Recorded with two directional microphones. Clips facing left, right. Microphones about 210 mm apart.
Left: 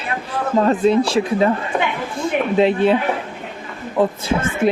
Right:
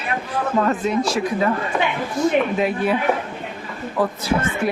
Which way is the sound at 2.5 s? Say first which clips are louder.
Left 5 dB; 25° left (ahead or behind).